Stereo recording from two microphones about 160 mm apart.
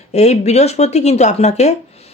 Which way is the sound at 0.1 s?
45° left (ahead or behind).